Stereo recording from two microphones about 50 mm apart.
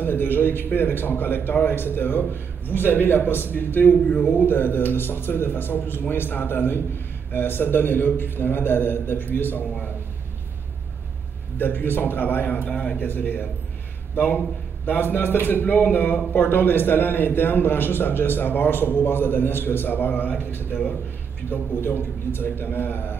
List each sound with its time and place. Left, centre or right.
0.0 s a man's voice: left
11.5 s a man's voice: left
13.0 s a man's voice: left